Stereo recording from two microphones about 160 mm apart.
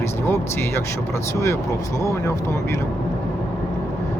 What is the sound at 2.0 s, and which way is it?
Speech, 20° left (ahead or behind).